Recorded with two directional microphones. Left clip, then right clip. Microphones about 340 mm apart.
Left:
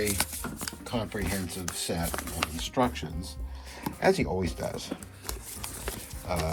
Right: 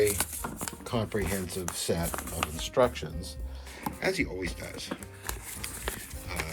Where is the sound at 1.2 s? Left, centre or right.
Centre.